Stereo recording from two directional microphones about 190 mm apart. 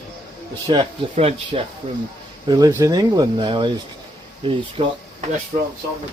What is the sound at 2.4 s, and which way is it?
Speech, 20° right (ahead or behind).